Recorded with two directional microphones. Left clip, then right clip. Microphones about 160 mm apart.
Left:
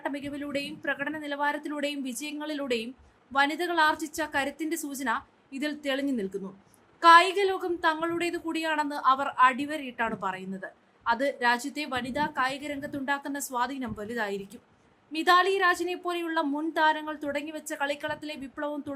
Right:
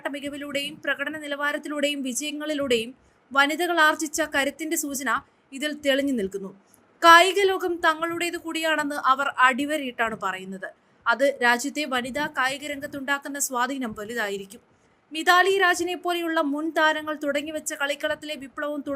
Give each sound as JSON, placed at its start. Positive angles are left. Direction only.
{"t": 0.0, "sound": "a woman's voice", "side_deg": -15}